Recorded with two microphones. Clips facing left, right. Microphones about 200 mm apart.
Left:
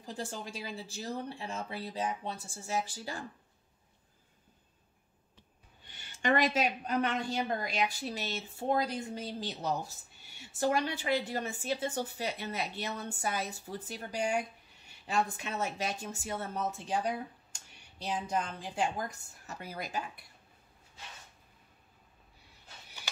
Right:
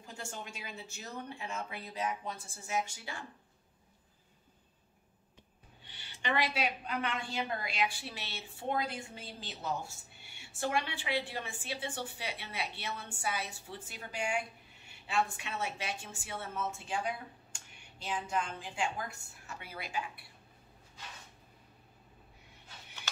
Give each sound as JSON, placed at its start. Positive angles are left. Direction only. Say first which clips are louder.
{"t": 0.0, "sound": "a woman's voice", "louder": "left 5 dB", "side_deg": 35}
{"t": 5.9, "sound": "a woman's voice", "louder": "left 7 dB", "side_deg": 45}